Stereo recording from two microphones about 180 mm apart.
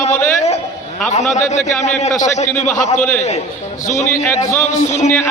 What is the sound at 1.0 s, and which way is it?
A man's voice, 40° left (ahead or behind).